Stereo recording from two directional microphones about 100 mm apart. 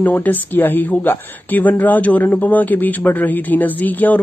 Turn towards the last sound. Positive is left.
turn(degrees=20)  # may be behind; listen again after turning